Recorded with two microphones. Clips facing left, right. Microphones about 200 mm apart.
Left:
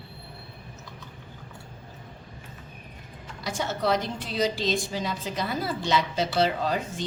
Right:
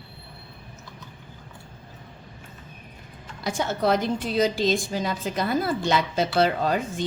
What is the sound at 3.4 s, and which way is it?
A woman's voice, 50° right (ahead or behind).